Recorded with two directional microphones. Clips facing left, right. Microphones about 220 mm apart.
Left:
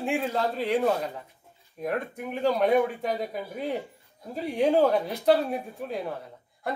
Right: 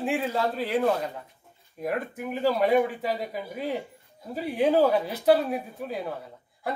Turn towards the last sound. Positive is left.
turn(degrees=-5)  # may be behind; listen again after turning